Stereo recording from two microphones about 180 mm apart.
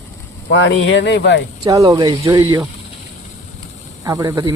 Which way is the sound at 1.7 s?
20° right (ahead or behind).